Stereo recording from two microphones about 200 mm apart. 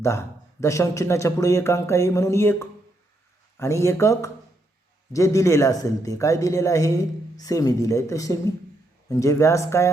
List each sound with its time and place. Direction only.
0.6 s speech: 15° left (ahead or behind)